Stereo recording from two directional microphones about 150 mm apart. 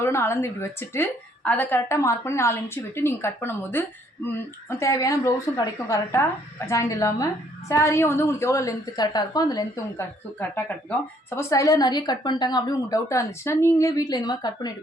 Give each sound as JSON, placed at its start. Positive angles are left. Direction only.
{"t": 0.0, "sound": "a woman's voice", "side_deg": 15}
{"t": 11.3, "sound": "a woman's voice", "side_deg": 20}